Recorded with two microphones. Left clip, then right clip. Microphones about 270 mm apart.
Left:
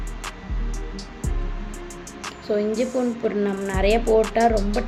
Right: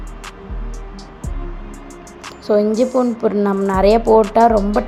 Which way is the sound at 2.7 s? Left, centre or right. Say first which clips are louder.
Right 7 dB; right.